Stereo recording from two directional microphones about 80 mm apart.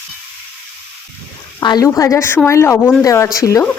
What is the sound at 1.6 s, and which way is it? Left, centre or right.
Speech, left.